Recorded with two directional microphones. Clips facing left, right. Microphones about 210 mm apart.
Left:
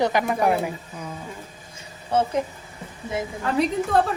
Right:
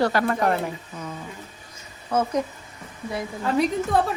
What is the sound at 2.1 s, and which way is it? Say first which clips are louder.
Speech: left 1 dB; 30° left (ahead or behind).